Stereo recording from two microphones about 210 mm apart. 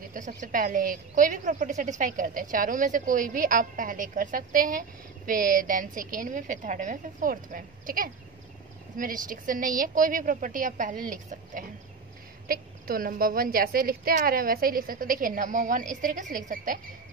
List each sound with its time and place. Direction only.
0.1 s a woman's voice: 40° right (ahead or behind)